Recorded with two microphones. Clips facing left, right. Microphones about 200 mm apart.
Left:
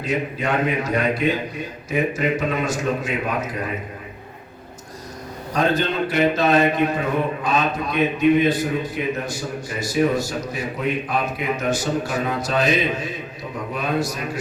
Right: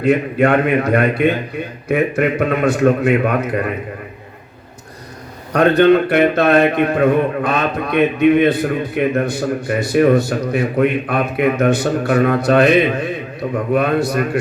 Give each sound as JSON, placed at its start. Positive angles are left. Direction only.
{"t": 0.0, "sound": "a man's voice", "side_deg": -60}
{"t": 5.5, "sound": "a man's voice", "side_deg": -60}